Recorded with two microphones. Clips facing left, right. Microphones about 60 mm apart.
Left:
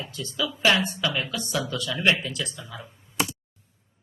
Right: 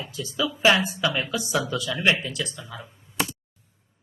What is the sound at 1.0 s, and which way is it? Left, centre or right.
Speech, centre.